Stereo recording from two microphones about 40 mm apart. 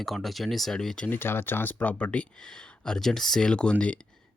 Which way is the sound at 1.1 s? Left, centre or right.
Left.